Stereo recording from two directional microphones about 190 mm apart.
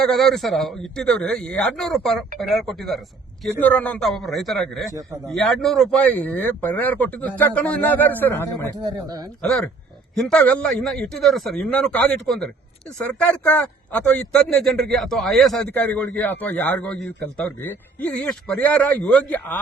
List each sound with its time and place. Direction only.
0.0 s a man's voice: centre (ahead or behind)
8.8 s speech: 20° right (ahead or behind)
10.2 s a man's voice: 5° left (ahead or behind)